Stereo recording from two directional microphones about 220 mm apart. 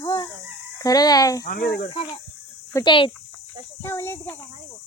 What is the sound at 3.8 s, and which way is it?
Speech, 10° left (ahead or behind).